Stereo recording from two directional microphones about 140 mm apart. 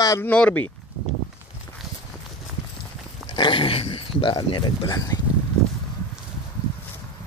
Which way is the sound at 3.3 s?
35° left (ahead or behind).